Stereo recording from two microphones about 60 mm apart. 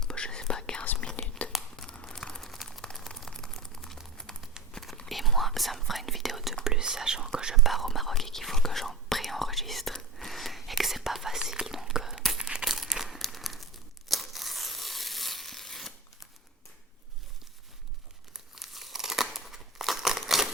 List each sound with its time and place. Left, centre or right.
0.0 s whispering: centre
1.7 s crumpling: centre
5.0 s whispering: centre
11.6 s a sound: centre
12.4 s crumpling: centre
14.1 s tearing: centre
18.3 s crumpling: centre